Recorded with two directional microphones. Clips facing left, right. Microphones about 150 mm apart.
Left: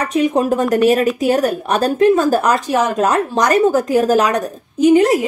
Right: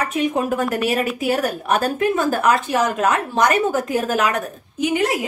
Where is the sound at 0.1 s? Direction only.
35° left (ahead or behind).